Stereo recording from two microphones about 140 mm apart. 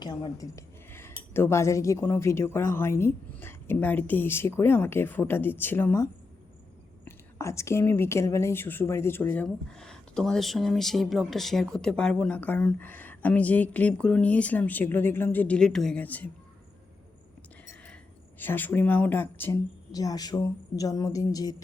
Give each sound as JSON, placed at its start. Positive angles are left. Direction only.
{"t": 0.0, "sound": "dishes", "side_deg": 25}
{"t": 1.3, "sound": "a woman's voice", "side_deg": 15}
{"t": 17.8, "sound": "speech", "side_deg": 10}
{"t": 19.9, "sound": "speech", "side_deg": 25}